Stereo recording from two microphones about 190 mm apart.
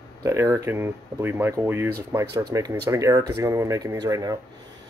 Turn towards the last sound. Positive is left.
turn(degrees=-20)  # may be behind; listen again after turning